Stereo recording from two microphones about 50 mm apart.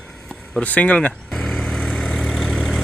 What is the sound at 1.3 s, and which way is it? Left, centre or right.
Vehicle, centre.